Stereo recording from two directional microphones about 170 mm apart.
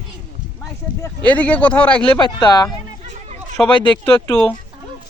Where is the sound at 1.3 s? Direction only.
10° left (ahead or behind).